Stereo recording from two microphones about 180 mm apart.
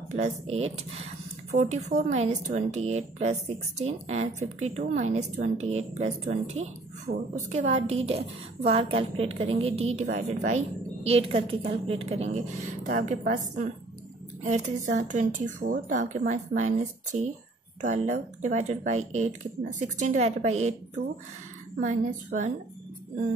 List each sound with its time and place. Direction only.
0.1 s speech: 35° right (ahead or behind)
14.4 s speech: 40° right (ahead or behind)